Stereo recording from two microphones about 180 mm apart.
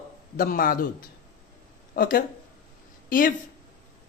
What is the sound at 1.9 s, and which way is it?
Speech, 55° left (ahead or behind).